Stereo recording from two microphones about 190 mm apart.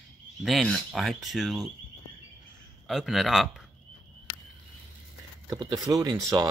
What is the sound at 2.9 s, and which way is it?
Speech, centre (ahead or behind).